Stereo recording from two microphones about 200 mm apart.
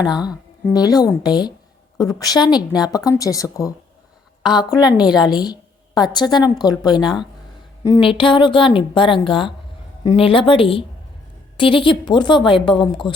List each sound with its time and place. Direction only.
0.0 s a woman's voice: 20° left (ahead or behind)